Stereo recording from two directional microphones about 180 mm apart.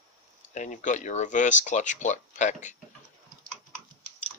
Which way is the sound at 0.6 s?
45° left (ahead or behind).